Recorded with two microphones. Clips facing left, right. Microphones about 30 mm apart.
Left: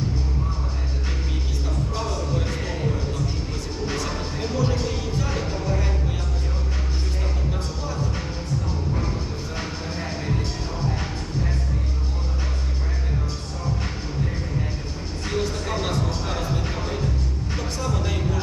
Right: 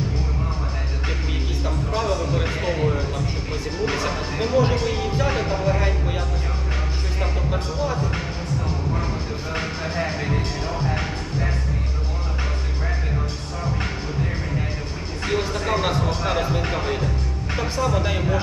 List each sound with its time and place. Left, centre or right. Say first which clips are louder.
1.9 s a sound: right 6 dB; right
4.7 s music: right 3 dB; right
9.6 s music: right 7 dB; right
15.3 s music: right 4 dB; right
17.7 s music: right 5 dB; right